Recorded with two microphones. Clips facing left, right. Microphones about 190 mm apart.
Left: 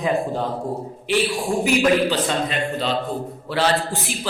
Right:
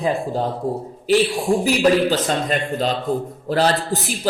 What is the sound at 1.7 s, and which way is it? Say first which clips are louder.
A man's voice: even; 40° right (ahead or behind).